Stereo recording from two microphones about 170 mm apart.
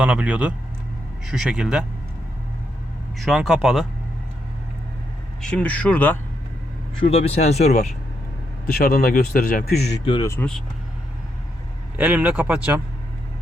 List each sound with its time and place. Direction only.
0.0 s speech: 5° right (ahead or behind)
3.2 s speech: centre (ahead or behind)
5.4 s speech: 5° left (ahead or behind)
7.0 s speech: 35° left (ahead or behind)
8.6 s a man's voice: 55° left (ahead or behind)
10.2 s speech: 15° left (ahead or behind)
11.9 s speech: 10° right (ahead or behind)